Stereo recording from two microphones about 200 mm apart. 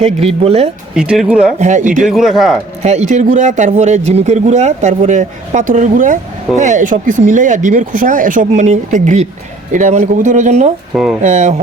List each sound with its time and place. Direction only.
0.0 s speech: 30° right (ahead or behind)
0.9 s speech: 5° right (ahead or behind)
1.5 s speech: 35° right (ahead or behind)
2.0 s speech: centre (ahead or behind)
2.8 s speech: 35° right (ahead or behind)
10.9 s speech: 5° right (ahead or behind)
11.2 s speech: 35° right (ahead or behind)